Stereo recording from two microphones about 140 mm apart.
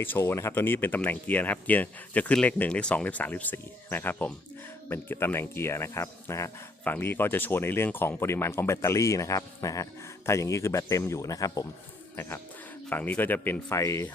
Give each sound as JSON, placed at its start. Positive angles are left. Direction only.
{"t": 0.0, "sound": "speech", "side_deg": 15}